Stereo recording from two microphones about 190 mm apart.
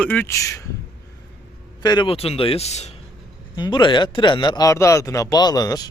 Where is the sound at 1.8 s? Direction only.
25° left (ahead or behind).